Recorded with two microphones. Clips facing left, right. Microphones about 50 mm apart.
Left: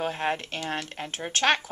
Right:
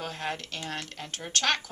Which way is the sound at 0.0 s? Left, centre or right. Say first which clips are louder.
Left 6 dB; left.